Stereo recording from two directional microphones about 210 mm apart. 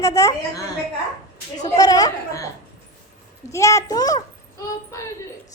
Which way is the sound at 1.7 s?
15° left (ahead or behind).